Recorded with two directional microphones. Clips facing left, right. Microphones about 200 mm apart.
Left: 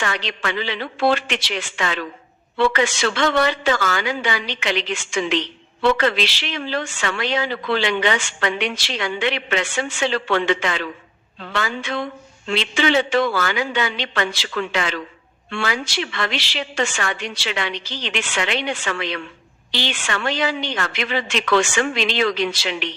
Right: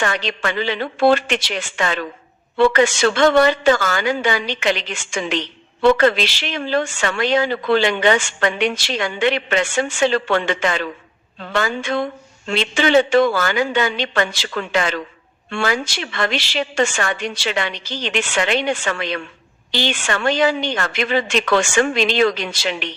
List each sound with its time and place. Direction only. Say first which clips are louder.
0.0 s a woman's voice: right 4 dB; 45° right (ahead or behind)